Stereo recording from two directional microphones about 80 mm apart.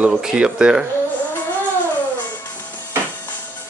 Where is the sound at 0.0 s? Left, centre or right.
Centre.